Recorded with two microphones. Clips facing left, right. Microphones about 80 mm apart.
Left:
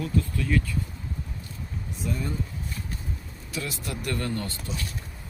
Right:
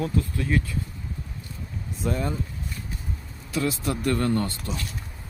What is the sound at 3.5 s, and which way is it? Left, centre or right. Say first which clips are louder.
Speech: right 7 dB; right.